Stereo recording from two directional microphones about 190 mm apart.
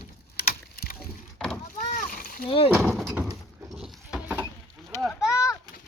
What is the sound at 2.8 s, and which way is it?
Door, 5° left (ahead or behind).